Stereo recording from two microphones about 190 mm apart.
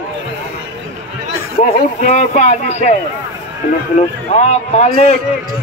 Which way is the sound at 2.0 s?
40° left (ahead or behind).